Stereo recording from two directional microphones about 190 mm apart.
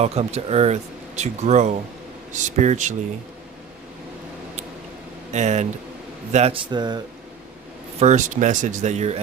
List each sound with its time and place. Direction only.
0.0 s speech: 35° right (ahead or behind)
5.3 s speech: 35° right (ahead or behind)
7.9 s speech: 40° right (ahead or behind)